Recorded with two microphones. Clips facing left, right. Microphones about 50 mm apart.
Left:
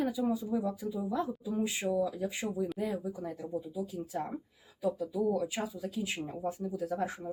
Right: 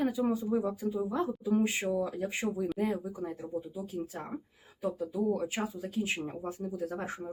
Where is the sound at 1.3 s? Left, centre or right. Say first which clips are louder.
Right 5 dB; right.